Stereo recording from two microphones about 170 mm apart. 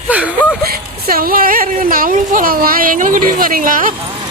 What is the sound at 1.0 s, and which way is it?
Speech, 60° right (ahead or behind).